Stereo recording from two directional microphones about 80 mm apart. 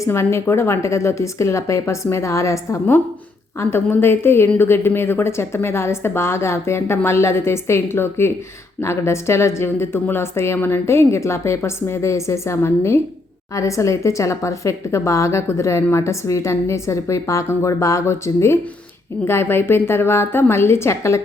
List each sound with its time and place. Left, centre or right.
0.0 s a woman's voice: left